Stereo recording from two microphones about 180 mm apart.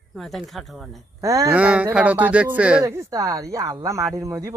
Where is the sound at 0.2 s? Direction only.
Centre (ahead or behind).